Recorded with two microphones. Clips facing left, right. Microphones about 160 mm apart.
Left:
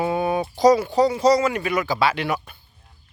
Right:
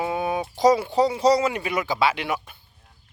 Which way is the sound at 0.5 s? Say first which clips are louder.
Left 2 dB; 25° right (ahead or behind).